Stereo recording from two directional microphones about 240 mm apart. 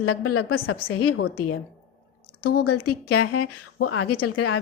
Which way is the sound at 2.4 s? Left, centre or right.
Left.